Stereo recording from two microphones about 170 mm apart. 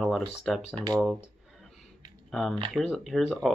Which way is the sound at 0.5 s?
Centre (ahead or behind).